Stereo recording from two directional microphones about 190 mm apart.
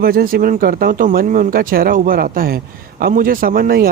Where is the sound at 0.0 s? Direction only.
50° right (ahead or behind).